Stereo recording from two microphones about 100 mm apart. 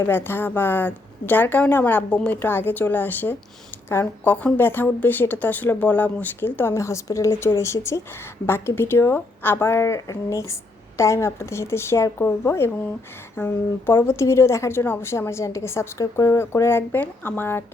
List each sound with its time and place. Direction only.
0.0 s a woman's voice: 20° left (ahead or behind)
6.7 s a woman's voice: 30° left (ahead or behind)